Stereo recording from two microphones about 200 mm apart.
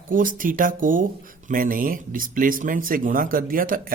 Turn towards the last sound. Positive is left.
turn(degrees=-45)  # may be behind; listen again after turning